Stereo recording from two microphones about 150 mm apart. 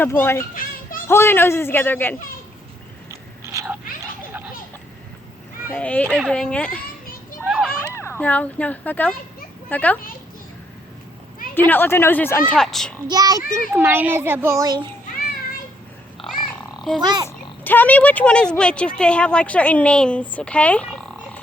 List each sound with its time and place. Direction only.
0.0 s a man's voice: 15° left (ahead or behind)
0.5 s music: 65° left (ahead or behind)
1.0 s a man's voice: 15° left (ahead or behind)
3.1 s biting: 20° right (ahead or behind)
5.7 s a man's voice: 10° left (ahead or behind)
7.4 s a sound: centre (ahead or behind)
7.8 s a man's voice: 15° left (ahead or behind)
11.7 s a man's voice: 15° left (ahead or behind)
13.1 s a child's voice: 25° right (ahead or behind)
13.7 s a child's voice: 15° right (ahead or behind)
17.0 s a child's voice: 30° right (ahead or behind)
17.2 s speech: 10° left (ahead or behind)